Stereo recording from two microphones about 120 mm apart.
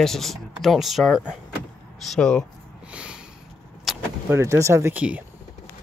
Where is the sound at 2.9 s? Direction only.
10° right (ahead or behind).